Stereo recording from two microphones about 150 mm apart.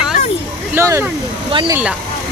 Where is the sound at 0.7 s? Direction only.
20° right (ahead or behind).